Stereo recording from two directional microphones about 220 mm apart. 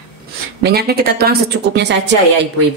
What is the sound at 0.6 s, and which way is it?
A woman's voice, 45° right (ahead or behind).